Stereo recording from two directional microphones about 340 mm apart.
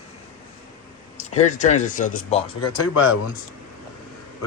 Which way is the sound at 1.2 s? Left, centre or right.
Left.